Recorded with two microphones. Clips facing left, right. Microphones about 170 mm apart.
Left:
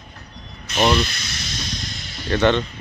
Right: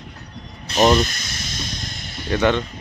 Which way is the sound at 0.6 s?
40° right (ahead or behind).